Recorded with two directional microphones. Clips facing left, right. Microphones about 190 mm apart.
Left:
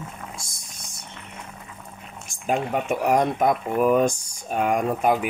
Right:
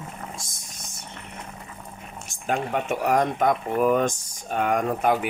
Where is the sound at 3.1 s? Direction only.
10° left (ahead or behind).